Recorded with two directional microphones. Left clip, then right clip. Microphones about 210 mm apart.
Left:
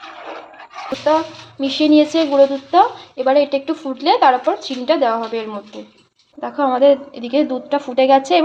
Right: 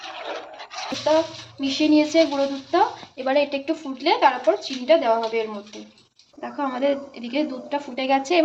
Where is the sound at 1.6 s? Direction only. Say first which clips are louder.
Left 6 dB; 25° left (ahead or behind).